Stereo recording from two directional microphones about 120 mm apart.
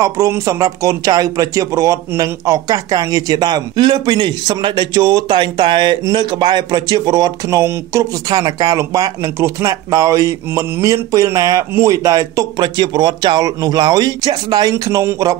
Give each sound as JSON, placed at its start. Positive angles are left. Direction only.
{"t": 0.0, "sound": "speech", "side_deg": -30}